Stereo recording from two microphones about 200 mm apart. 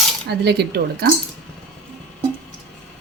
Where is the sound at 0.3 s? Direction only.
55° right (ahead or behind).